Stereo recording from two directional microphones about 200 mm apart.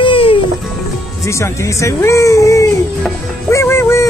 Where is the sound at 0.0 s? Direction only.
25° left (ahead or behind).